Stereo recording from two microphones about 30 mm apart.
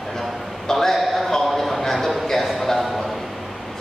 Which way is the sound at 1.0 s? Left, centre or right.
Centre.